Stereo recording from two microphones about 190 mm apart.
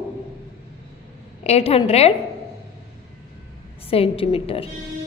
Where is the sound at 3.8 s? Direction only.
30° left (ahead or behind).